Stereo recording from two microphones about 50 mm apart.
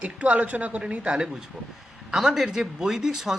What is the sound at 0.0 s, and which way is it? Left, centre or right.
A woman's voice, right.